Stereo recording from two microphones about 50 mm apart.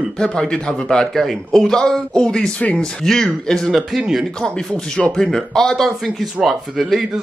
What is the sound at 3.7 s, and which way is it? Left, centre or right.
Speech, centre.